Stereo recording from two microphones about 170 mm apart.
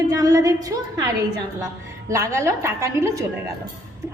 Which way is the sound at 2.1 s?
15° right (ahead or behind).